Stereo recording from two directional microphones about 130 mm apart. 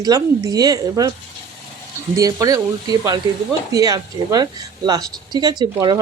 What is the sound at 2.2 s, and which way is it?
Speech, 25° right (ahead or behind).